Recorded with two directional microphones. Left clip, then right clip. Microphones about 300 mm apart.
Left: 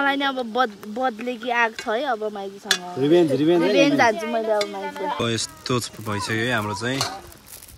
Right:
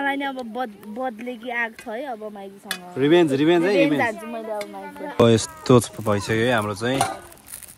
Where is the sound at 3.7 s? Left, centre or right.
Centre.